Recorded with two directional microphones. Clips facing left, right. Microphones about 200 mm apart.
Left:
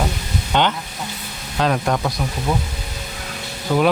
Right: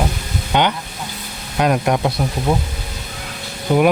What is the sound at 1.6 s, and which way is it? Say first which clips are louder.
Speech: right 3 dB; 15° right (ahead or behind).